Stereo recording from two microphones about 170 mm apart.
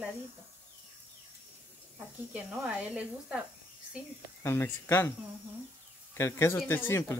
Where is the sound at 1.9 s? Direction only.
5° right (ahead or behind).